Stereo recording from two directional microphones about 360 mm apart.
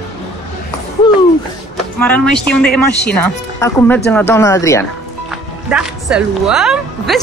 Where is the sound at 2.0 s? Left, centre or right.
Centre.